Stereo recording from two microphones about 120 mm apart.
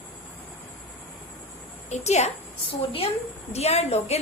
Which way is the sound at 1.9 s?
70° left (ahead or behind).